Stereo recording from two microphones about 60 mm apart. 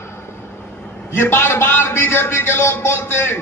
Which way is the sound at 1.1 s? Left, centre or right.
Left.